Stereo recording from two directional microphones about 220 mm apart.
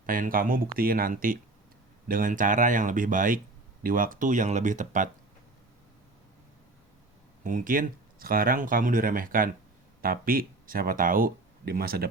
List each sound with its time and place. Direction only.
0.0 s speech: 40° right (ahead or behind)
7.4 s speech: 35° right (ahead or behind)